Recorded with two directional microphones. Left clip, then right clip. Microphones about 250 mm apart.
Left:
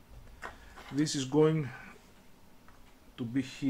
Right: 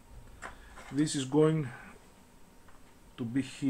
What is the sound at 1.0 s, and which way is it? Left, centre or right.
Speech, centre.